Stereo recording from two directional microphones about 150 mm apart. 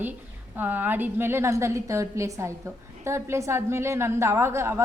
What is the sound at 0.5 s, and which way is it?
A woman's voice, 10° right (ahead or behind).